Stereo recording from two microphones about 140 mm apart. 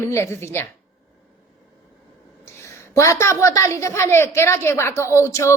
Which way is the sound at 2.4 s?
20° left (ahead or behind).